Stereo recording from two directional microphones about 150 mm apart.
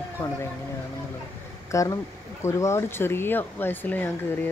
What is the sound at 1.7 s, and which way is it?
Speech, 20° left (ahead or behind).